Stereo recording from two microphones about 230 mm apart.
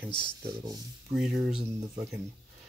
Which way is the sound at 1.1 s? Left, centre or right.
Centre.